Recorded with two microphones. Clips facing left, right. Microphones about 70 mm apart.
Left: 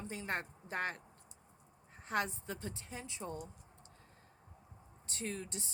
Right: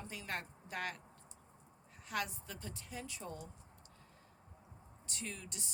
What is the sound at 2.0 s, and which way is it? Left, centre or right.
A woman's voice, left.